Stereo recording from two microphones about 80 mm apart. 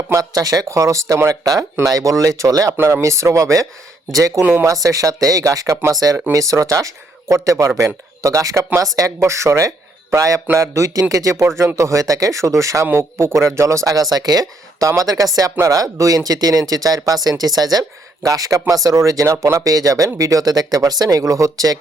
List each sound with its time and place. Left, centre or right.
0.1 s speech: right
2.7 s speech: right
14.8 s speech: right